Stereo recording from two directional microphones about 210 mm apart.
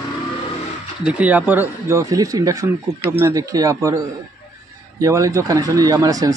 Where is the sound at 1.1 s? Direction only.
5° right (ahead or behind).